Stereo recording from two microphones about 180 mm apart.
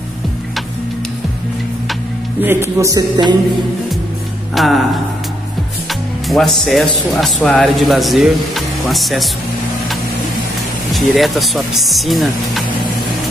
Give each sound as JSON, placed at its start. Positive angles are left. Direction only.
{"t": 2.4, "sound": "speech", "side_deg": -15}
{"t": 4.6, "sound": "speech", "side_deg": 0}
{"t": 6.2, "sound": "speech", "side_deg": 0}
{"t": 10.9, "sound": "speech", "side_deg": 0}